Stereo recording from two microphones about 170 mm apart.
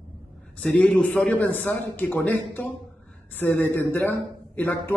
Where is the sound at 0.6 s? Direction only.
10° left (ahead or behind).